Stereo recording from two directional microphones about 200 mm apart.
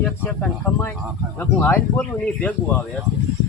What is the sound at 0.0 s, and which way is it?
Speech, 10° left (ahead or behind).